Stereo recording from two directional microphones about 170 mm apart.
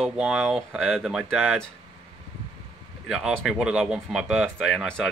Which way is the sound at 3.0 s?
Centre (ahead or behind).